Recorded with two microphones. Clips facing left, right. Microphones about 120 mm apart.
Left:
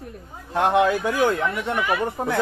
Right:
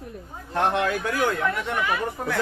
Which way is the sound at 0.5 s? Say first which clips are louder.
Left 4 dB; 10° left (ahead or behind).